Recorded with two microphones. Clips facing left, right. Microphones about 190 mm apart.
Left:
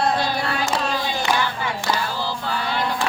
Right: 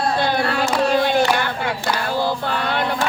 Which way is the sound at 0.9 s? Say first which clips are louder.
Right 6 dB; 60° right (ahead or behind).